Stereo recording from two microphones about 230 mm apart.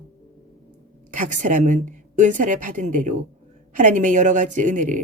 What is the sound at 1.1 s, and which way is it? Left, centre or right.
A woman's voice, right.